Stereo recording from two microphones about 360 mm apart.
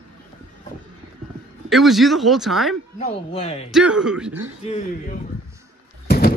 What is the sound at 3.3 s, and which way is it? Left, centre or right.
Speech, centre.